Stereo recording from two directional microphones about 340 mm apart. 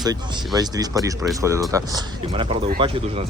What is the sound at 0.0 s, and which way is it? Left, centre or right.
Speech, centre.